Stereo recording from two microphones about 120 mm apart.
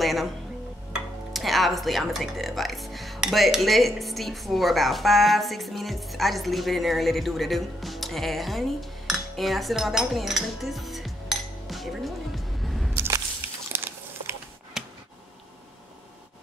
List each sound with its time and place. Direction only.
0.0 s music: centre (ahead or behind)
1.3 s speech: centre (ahead or behind)
11.6 s music: centre (ahead or behind)
12.9 s a sound: 25° right (ahead or behind)
13.7 s crumpling: 20° right (ahead or behind)
14.8 s a sound: 5° right (ahead or behind)